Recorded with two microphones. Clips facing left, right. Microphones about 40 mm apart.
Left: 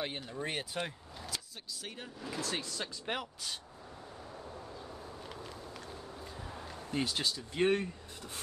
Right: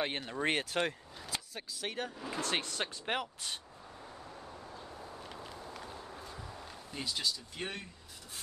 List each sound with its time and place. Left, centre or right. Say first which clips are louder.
0.0 s speech: right 4 dB; right
2.1 s speech: right 1 dB; centre
2.4 s speech: right 4 dB; right
3.1 s speech: right 1 dB; right
5.2 s vehicle: even; centre
6.9 s speech: left 3 dB; left